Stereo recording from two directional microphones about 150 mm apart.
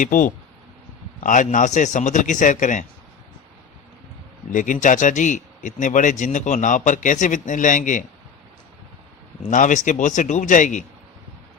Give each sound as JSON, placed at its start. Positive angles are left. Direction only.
{"t": 0.0, "sound": "speech", "side_deg": 60}
{"t": 4.5, "sound": "speech", "side_deg": 60}
{"t": 9.5, "sound": "speech", "side_deg": 55}